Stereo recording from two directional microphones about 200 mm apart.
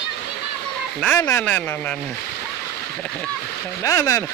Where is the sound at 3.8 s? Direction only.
15° left (ahead or behind).